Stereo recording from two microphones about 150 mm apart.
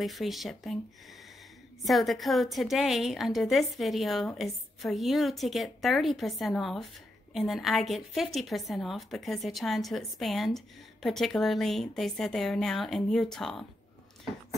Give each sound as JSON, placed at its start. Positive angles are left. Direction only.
{"t": 0.0, "sound": "a woman's voice", "side_deg": 0}
{"t": 1.9, "sound": "a woman's voice", "side_deg": 0}